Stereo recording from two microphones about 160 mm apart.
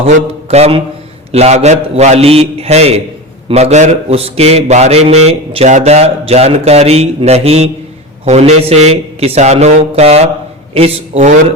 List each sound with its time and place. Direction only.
0.5 s a man's voice: 40° right (ahead or behind)